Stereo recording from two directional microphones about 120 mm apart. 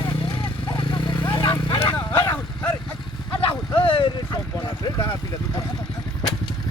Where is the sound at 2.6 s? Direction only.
10° left (ahead or behind).